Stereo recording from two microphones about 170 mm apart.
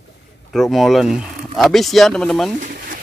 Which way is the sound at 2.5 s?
50° right (ahead or behind).